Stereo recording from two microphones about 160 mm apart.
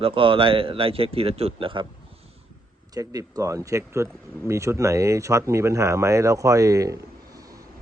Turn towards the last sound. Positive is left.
turn(degrees=-20)  # may be behind; listen again after turning